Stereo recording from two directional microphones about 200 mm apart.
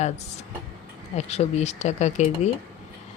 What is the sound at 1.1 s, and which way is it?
Speech, 35° left (ahead or behind).